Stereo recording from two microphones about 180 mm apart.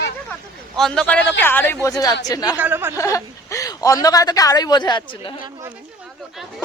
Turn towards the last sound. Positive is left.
turn(degrees=30)  # may be behind; listen again after turning